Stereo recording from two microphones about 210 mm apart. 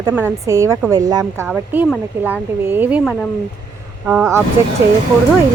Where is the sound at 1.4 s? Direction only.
5° right (ahead or behind).